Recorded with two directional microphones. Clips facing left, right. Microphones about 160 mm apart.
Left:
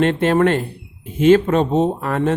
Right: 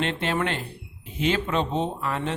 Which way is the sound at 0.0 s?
45° left (ahead or behind).